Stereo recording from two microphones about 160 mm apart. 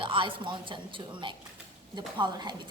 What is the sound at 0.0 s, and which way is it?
A woman's voice, 30° right (ahead or behind).